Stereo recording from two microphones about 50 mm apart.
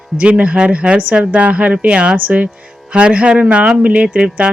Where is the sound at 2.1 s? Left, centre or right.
Right.